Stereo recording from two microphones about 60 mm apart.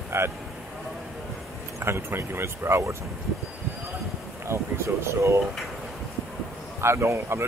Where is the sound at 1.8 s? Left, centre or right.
Right.